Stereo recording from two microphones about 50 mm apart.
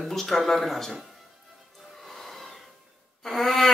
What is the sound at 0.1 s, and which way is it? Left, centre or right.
Speech, centre.